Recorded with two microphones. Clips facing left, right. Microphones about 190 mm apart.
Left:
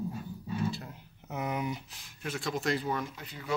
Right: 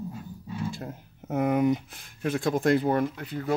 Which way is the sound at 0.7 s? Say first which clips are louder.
Right 5 dB; 50° right (ahead or behind).